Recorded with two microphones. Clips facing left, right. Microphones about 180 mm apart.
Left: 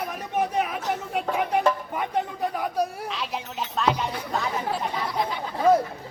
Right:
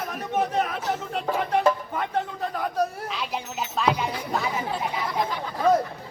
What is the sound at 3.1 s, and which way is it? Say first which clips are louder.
Speech: right 1 dB; centre (ahead or behind).